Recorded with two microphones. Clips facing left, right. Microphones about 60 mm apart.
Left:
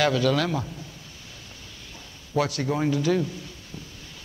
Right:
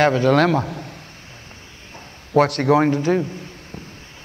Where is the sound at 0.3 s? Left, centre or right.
Right.